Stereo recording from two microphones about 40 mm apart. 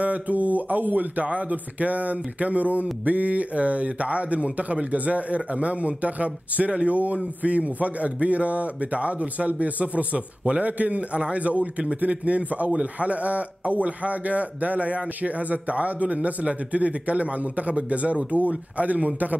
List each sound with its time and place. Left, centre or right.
0.0 s a man's voice: right